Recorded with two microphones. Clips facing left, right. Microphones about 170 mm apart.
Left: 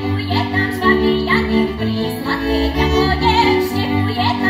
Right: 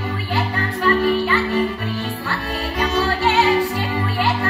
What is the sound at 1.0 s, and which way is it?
Music, 30° left (ahead or behind).